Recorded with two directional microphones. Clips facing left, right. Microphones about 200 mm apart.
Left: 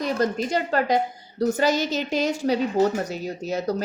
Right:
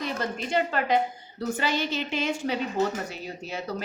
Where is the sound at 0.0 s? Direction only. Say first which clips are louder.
Left 7 dB; 40° left (ahead or behind).